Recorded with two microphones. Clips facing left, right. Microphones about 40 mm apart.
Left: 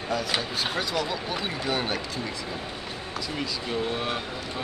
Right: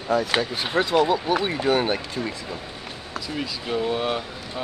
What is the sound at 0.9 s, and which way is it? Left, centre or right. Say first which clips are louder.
Speech: right 9 dB; right.